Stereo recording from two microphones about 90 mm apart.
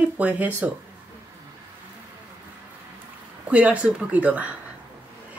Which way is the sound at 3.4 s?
15° right (ahead or behind).